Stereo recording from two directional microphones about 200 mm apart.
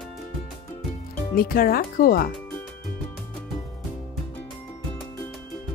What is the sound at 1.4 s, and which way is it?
Speech, 45° left (ahead or behind).